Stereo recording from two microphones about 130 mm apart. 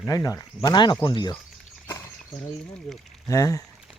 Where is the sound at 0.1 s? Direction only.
25° left (ahead or behind).